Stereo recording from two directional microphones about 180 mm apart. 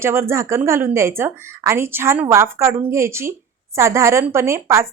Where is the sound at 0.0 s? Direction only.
15° right (ahead or behind).